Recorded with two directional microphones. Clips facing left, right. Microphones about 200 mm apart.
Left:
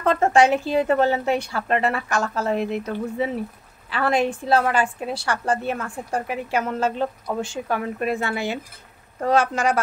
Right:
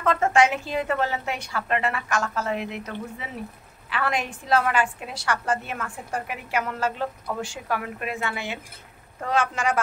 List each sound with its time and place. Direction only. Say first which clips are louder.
0.0 s a woman's voice: left 3 dB; 35° left (ahead or behind)
8.0 s a woman's voice: left 6 dB; 35° left (ahead or behind)